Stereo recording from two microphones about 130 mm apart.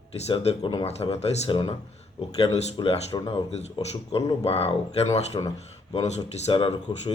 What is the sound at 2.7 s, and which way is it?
Speech, 40° left (ahead or behind).